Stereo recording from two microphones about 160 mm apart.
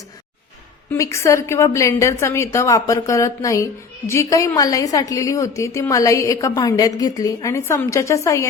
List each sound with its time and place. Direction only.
0.9 s a woman's voice: 20° left (ahead or behind)